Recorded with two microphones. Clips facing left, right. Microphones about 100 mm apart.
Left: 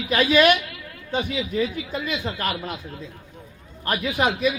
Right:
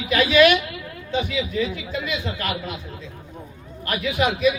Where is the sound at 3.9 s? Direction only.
35° left (ahead or behind).